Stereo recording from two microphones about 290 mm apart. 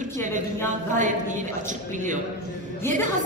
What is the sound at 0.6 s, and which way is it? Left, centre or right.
Speech, right.